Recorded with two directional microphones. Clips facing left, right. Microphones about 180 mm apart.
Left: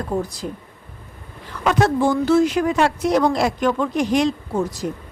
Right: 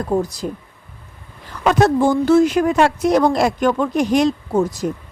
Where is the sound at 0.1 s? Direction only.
40° right (ahead or behind).